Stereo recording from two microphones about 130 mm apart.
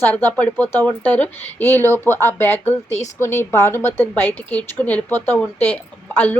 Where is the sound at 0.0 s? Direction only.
15° left (ahead or behind).